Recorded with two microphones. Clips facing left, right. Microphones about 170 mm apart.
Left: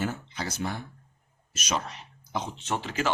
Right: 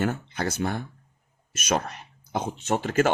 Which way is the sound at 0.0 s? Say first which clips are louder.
Right 5 dB; 55° right (ahead or behind).